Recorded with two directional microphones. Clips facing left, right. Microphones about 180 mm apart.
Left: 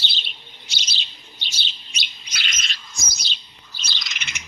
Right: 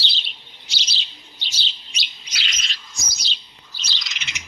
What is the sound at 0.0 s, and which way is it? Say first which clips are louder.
Chirp: even; 50° left (ahead or behind).